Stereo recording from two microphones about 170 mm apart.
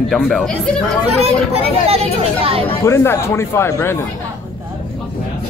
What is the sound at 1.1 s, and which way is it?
Speech, 35° right (ahead or behind).